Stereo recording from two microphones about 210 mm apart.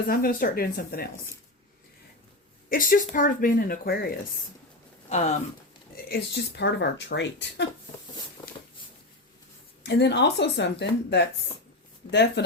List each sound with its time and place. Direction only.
0.1 s speech: 45° left (ahead or behind)
2.6 s speech: 40° left (ahead or behind)
5.0 s speech: 35° left (ahead or behind)
6.1 s speech: 55° left (ahead or behind)
8.4 s a sound: 20° left (ahead or behind)
9.8 s speech: 55° left (ahead or behind)
12.0 s speech: 25° left (ahead or behind)